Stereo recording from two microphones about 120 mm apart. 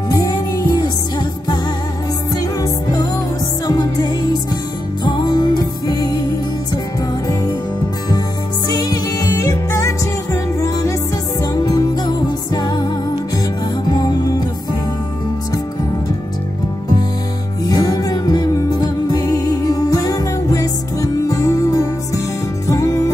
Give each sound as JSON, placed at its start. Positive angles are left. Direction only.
{"t": 0.1, "sound": "music", "side_deg": 30}
{"t": 2.6, "sound": "music", "side_deg": 30}
{"t": 8.6, "sound": "music", "side_deg": 35}
{"t": 17.6, "sound": "music", "side_deg": 30}